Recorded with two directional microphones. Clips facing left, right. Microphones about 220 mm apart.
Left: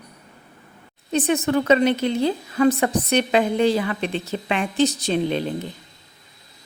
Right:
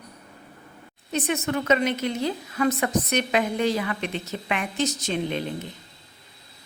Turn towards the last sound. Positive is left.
turn(degrees=35)  # may be behind; listen again after turning